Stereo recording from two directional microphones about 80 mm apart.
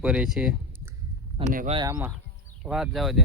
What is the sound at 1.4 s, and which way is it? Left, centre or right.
Speech, right.